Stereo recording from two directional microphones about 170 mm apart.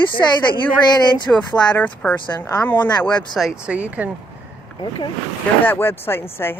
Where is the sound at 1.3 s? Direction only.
5° left (ahead or behind).